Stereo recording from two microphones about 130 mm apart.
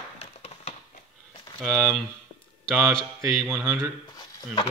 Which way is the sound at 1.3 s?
35° left (ahead or behind).